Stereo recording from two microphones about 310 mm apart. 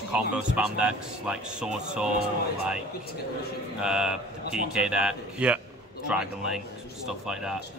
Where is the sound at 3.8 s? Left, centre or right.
Centre.